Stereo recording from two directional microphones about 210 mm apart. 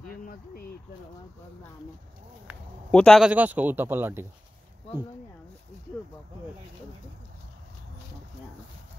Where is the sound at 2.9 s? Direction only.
5° left (ahead or behind).